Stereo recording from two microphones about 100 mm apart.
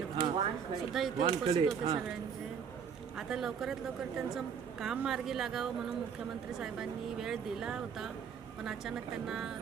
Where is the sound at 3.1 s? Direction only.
5° right (ahead or behind).